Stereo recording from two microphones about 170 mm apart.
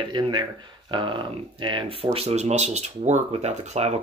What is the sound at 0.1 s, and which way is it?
Speech, 25° right (ahead or behind).